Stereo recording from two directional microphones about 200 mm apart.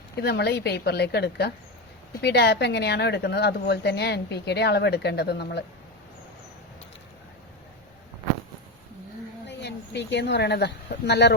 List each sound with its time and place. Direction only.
0.2 s a woman's voice: 55° left (ahead or behind)
9.5 s speech: 60° left (ahead or behind)